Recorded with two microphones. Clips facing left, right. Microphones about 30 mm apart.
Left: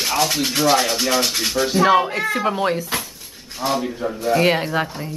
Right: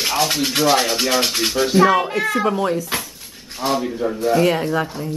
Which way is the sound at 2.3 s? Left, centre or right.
Centre.